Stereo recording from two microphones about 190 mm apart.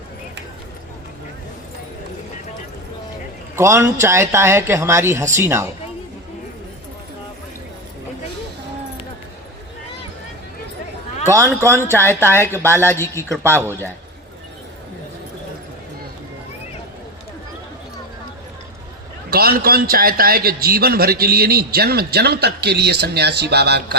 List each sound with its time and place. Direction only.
3.5 s a man's voice: 15° right (ahead or behind)
11.7 s a man's voice: 15° right (ahead or behind)
12.7 s a man's voice: 10° left (ahead or behind)
19.3 s a man's voice: 50° right (ahead or behind)